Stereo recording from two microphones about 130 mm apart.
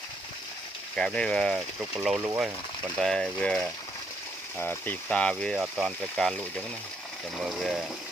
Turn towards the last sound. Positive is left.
turn(degrees=-5)  # may be behind; listen again after turning